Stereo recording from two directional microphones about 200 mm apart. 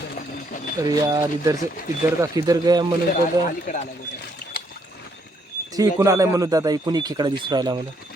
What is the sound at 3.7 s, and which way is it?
Speech, 40° left (ahead or behind).